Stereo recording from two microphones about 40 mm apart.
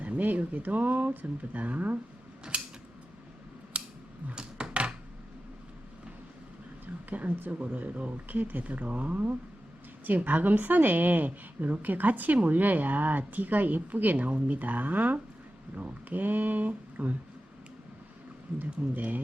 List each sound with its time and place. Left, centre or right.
0.0 s a woman's voice: right
2.5 s scissors: right
3.7 s scissors: right
4.4 s computer keyboard: right
7.1 s a woman's voice: right
18.6 s a woman's voice: right